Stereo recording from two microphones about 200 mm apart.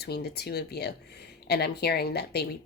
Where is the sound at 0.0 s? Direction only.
55° left (ahead or behind).